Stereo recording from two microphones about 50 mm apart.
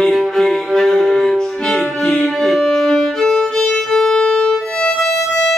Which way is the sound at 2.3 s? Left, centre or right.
Centre.